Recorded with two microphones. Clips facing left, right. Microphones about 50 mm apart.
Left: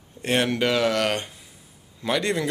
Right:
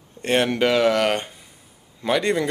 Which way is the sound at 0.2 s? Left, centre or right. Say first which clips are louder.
Right 3 dB; centre.